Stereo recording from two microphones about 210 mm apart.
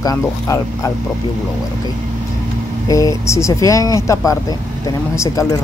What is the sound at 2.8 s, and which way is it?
Speech, 15° left (ahead or behind).